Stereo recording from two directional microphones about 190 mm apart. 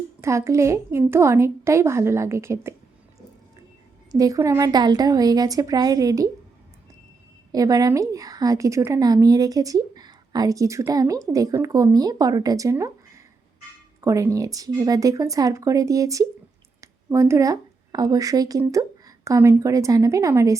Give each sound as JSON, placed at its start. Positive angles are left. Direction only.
{"t": 0.2, "sound": "a woman's voice", "side_deg": -15}
{"t": 4.1, "sound": "a woman's voice", "side_deg": -20}
{"t": 7.5, "sound": "a woman's voice", "side_deg": -20}
{"t": 14.0, "sound": "a woman's voice", "side_deg": -15}